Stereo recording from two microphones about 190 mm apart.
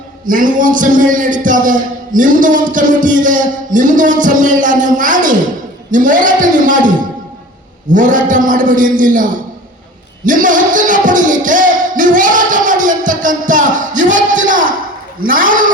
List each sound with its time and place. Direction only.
0.3 s a man's voice: 45° right (ahead or behind)
7.9 s a man's voice: 45° right (ahead or behind)
10.2 s music: 45° right (ahead or behind)
15.2 s a man's voice: 45° right (ahead or behind)